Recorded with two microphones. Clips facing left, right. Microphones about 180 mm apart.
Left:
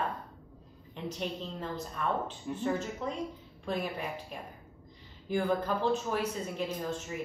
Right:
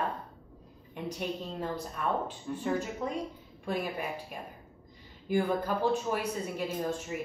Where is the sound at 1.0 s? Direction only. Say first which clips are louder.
Right 1 dB; 10° right (ahead or behind).